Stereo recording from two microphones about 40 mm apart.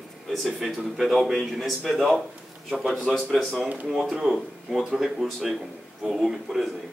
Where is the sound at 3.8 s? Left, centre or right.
Centre.